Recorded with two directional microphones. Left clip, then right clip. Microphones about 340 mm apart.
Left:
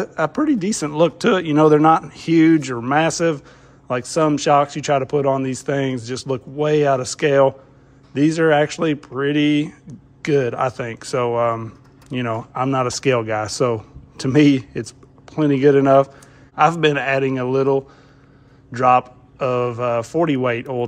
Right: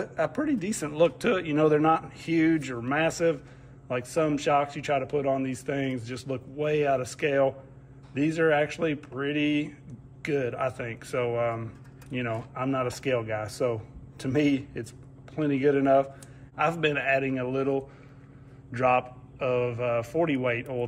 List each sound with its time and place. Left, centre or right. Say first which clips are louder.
0.0 s a man's voice: left 8 dB; centre
11.6 s typing: left 7 dB; centre
12.5 s a man's voice: left 10 dB; centre